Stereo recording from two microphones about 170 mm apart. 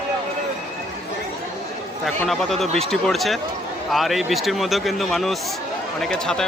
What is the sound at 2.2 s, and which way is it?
A man's voice, centre (ahead or behind).